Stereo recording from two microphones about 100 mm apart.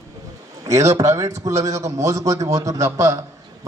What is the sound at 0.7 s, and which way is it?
A man's voice, 30° right (ahead or behind).